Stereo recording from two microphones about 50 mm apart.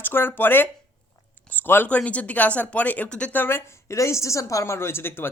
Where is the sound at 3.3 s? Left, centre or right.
Left.